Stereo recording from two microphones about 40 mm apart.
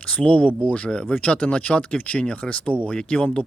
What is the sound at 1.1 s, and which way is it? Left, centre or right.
Speech, left.